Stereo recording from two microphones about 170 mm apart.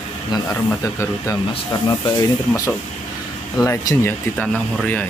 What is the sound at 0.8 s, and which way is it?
Speech, 20° left (ahead or behind).